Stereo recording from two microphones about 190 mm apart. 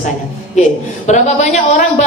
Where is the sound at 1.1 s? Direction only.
35° left (ahead or behind).